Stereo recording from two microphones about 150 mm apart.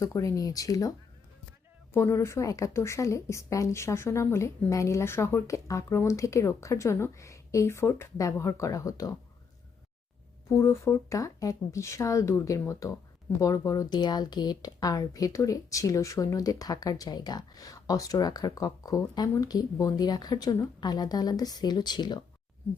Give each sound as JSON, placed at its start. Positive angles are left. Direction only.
{"t": 0.0, "sound": "a woman's voice", "side_deg": 20}
{"t": 10.5, "sound": "a woman's voice", "side_deg": 20}